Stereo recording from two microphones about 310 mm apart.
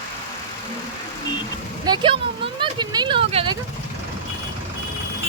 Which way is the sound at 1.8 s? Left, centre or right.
Centre.